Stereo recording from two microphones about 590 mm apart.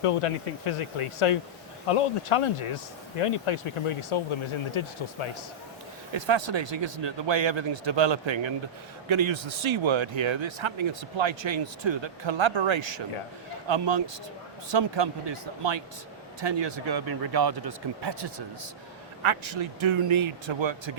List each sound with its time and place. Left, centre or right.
0.6 s speech: left
6.1 s speech: right
19.2 s speech: right